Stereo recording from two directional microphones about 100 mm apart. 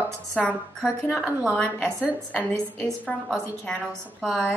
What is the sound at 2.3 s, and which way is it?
A woman's voice, 15° left (ahead or behind).